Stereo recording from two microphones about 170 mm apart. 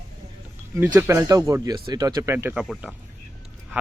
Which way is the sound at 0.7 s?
15° right (ahead or behind).